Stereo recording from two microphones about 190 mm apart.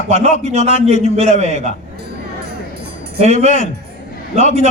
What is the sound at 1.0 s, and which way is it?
Speech, 35° right (ahead or behind).